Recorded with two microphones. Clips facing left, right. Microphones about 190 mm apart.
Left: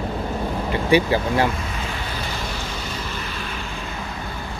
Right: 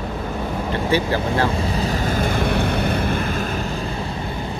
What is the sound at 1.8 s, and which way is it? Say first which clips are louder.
Boat: right 8 dB; 45° right (ahead or behind).